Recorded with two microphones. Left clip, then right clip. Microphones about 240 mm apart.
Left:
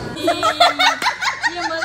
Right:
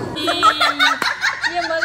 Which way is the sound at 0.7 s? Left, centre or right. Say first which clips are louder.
Even; centre.